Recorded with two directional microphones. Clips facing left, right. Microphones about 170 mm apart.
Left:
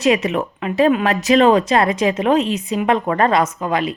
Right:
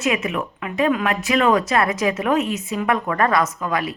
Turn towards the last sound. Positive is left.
turn(degrees=25)  # may be behind; listen again after turning